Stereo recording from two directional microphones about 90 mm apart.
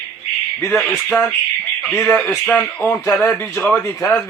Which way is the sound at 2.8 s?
25° left (ahead or behind).